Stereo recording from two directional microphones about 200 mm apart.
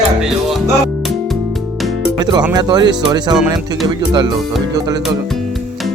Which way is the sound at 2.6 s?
20° right (ahead or behind).